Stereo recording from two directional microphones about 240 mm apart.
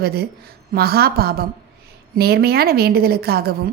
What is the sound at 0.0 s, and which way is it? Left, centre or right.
A woman's voice, right.